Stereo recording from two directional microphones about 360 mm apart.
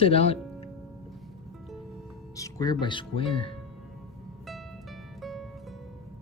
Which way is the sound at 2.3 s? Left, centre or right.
Centre.